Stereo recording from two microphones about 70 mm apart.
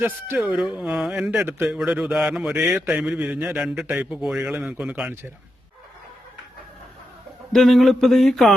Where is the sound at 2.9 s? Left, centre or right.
Right.